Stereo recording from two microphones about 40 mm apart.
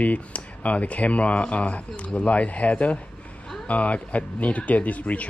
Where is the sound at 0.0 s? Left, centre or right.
Left.